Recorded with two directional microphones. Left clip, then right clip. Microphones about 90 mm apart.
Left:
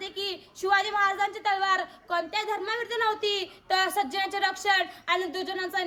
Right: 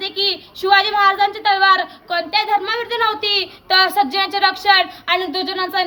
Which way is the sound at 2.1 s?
40° left (ahead or behind).